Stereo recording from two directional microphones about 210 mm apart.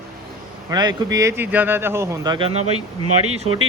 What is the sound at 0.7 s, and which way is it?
Speech, 20° right (ahead or behind).